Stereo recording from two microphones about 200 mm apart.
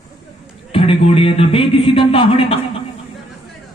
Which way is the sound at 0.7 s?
30° left (ahead or behind).